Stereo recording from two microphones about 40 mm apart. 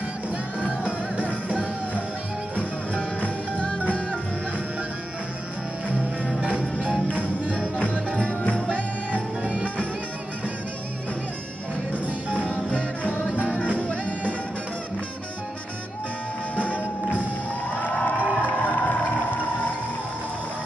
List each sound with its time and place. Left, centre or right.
2.5 s music: left
7.6 s music: left
8.5 s music: left
9.4 s music: right
11.9 s music: right
13.5 s music: left
17.7 s a sound: left
18.1 s music: right
18.7 s a sound: left